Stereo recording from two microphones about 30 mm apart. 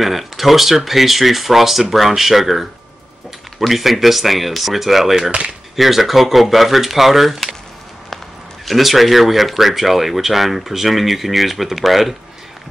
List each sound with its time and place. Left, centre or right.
0.0 s speech: centre
5.3 s speech: right
5.8 s speech: centre
8.6 s speech: centre